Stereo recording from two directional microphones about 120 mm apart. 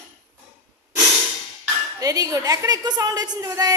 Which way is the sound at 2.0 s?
30° right (ahead or behind).